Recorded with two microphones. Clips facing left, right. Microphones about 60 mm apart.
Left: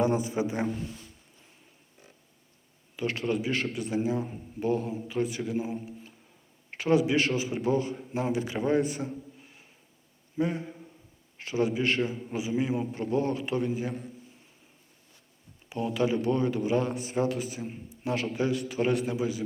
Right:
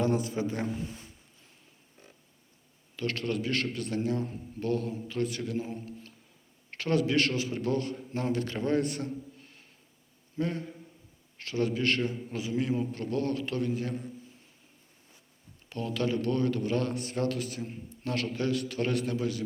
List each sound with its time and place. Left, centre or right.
0.0 s speech: centre
0.9 s a sound: right
2.9 s a man's voice: centre
15.7 s a man's voice: centre